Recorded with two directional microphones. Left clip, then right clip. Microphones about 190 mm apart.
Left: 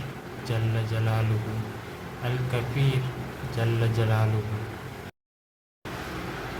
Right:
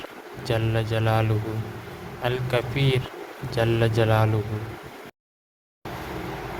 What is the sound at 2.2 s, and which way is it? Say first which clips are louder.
Speech: right 7 dB; 50° right (ahead or behind).